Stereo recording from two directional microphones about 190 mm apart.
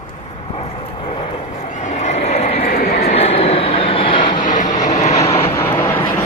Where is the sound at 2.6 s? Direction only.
50° left (ahead or behind).